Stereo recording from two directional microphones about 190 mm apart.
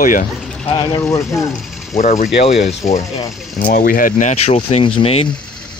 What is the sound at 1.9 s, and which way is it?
Speech, 40° left (ahead or behind).